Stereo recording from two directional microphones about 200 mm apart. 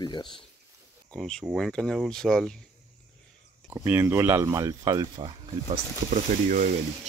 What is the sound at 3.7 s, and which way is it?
Speech, 10° right (ahead or behind).